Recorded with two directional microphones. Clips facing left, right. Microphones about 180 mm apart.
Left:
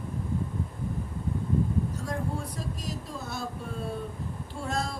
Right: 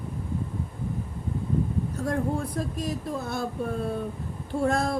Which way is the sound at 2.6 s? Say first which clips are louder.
Right 6 dB; 55° right (ahead or behind).